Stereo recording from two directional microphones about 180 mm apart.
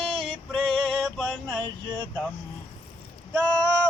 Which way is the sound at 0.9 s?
Centre (ahead or behind).